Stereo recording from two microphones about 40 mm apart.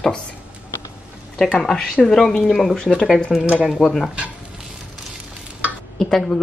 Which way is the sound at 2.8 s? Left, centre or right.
Left.